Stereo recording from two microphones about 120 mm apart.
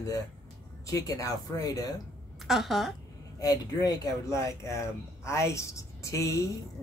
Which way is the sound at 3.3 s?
30° left (ahead or behind).